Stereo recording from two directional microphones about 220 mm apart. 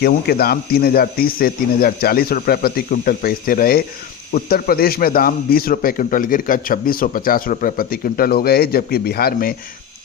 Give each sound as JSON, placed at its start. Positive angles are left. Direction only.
{"t": 0.0, "sound": "a man's voice", "side_deg": 45}